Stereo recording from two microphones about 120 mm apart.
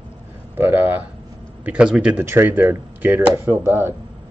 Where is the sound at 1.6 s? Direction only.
10° right (ahead or behind).